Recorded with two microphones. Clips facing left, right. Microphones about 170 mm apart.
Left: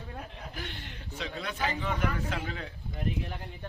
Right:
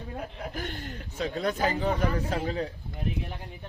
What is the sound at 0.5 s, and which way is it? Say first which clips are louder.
A man's voice: right 6 dB; 45° right (ahead or behind).